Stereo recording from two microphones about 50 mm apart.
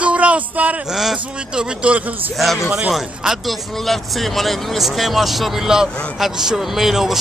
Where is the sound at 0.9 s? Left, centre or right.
Centre.